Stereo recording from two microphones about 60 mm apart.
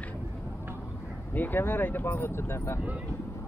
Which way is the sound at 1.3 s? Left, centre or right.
Left.